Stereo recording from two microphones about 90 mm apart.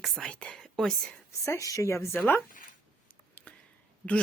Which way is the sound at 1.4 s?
35° left (ahead or behind).